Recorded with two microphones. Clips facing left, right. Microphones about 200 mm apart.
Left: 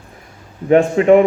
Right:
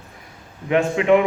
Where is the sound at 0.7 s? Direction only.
40° left (ahead or behind).